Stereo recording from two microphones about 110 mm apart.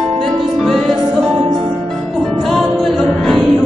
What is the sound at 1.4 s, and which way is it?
Music, 70° right (ahead or behind).